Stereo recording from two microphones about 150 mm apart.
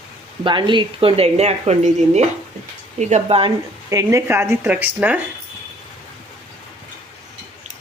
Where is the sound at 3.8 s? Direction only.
20° right (ahead or behind).